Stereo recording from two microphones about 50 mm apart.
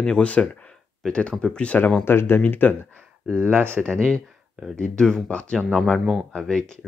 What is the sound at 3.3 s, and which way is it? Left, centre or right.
Speech, right.